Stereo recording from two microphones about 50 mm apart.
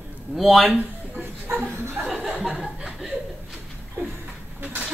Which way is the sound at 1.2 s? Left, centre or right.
Right.